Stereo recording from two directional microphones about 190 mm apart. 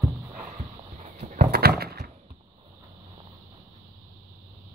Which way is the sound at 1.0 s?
40° right (ahead or behind).